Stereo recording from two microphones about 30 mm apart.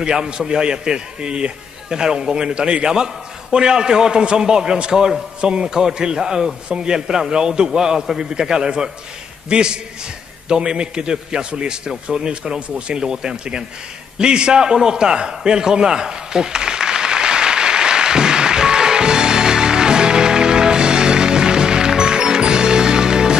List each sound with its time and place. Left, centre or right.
0.0 s a man's voice: right
5.7 s a man's voice: centre
13.0 s a man's voice: centre
14.1 s a sound: right